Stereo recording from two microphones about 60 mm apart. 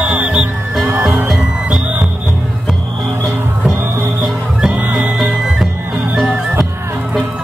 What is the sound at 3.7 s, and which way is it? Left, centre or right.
Music, right.